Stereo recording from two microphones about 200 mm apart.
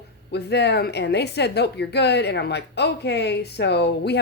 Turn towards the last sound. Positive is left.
turn(degrees=55)  # may be behind; listen again after turning